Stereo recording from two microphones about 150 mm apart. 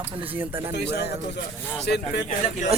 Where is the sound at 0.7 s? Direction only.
90° left.